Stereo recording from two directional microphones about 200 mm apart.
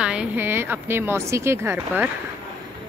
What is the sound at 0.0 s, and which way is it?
Speech, 5° right (ahead or behind).